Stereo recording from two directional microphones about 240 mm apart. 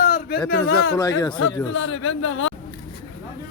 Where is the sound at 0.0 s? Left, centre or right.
Left.